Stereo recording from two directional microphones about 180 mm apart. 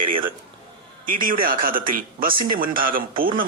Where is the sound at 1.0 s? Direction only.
50° right (ahead or behind).